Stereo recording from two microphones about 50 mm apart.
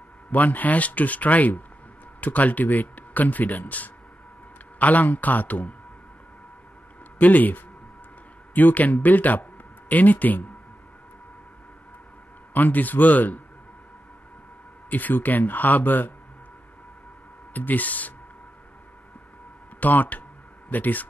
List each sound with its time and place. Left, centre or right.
0.3 s speech: left
7.2 s speech: left
12.5 s speech: left
14.9 s speech: left
17.6 s speech: left
19.8 s speech: left